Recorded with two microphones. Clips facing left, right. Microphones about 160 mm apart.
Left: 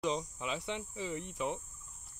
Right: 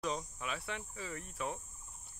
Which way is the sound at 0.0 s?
25° left (ahead or behind).